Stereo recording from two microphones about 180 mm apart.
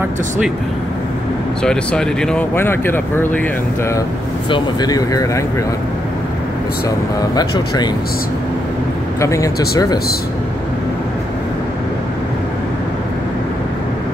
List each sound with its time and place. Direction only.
1.6 s speech: 5° left (ahead or behind)
4.5 s speech: 25° left (ahead or behind)
7.3 s speech: 20° left (ahead or behind)
9.2 s speech: 15° left (ahead or behind)